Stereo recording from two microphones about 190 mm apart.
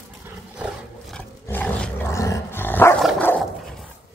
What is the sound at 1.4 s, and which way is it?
Dog, 10° left (ahead or behind).